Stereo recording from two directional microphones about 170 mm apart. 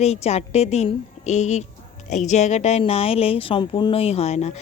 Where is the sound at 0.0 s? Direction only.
40° left (ahead or behind).